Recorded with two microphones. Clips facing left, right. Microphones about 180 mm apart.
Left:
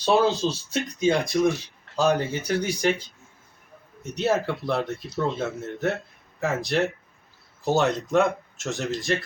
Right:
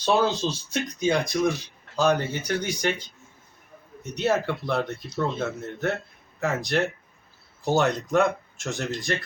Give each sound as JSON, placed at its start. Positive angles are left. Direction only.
{"t": 0.1, "sound": "speech", "side_deg": 0}
{"t": 2.5, "sound": "speech", "side_deg": 35}
{"t": 4.1, "sound": "speech", "side_deg": 0}